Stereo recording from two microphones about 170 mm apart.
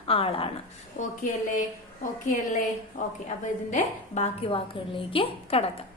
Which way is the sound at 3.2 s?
40° left (ahead or behind).